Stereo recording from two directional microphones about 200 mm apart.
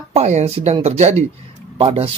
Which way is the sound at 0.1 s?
35° right (ahead or behind).